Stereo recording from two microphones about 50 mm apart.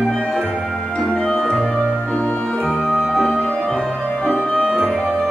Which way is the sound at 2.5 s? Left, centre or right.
Centre.